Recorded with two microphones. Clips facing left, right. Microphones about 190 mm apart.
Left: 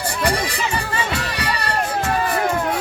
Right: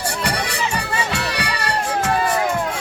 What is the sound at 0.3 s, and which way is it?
Music, 70° right (ahead or behind).